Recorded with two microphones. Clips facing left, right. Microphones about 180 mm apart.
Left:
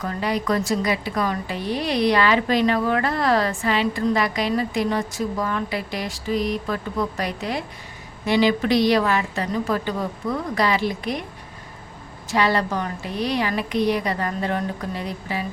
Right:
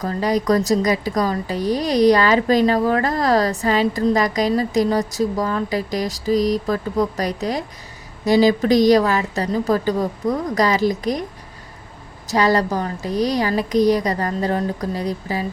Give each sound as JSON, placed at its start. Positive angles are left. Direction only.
{"t": 0.0, "sound": "a woman's voice", "side_deg": -40}
{"t": 12.3, "sound": "a woman's voice", "side_deg": -40}